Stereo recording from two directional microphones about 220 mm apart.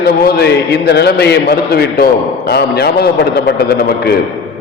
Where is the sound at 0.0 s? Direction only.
45° left (ahead or behind).